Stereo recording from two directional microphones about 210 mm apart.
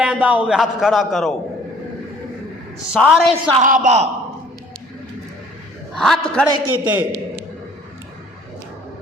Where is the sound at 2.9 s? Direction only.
5° right (ahead or behind).